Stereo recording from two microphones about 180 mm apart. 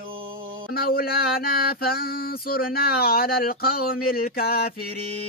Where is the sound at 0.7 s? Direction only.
55° left (ahead or behind).